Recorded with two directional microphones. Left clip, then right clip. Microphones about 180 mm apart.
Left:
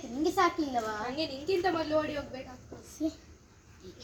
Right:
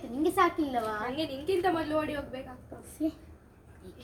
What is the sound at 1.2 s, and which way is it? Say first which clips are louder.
Speech: right 1 dB; 30° right (ahead or behind).